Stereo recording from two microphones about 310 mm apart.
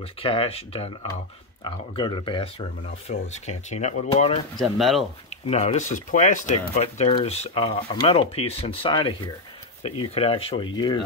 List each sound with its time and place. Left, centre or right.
0.2 s speech: centre
4.6 s speech: centre
5.5 s speech: left